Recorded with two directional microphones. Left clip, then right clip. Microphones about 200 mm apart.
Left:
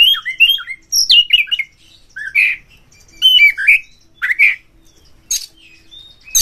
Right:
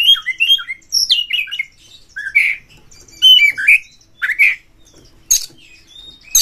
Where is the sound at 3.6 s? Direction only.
Centre (ahead or behind).